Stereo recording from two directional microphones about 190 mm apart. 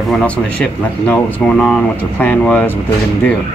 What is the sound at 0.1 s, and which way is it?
Speech, 5° left (ahead or behind).